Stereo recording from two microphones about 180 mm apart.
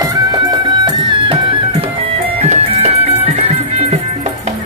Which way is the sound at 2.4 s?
35° right (ahead or behind).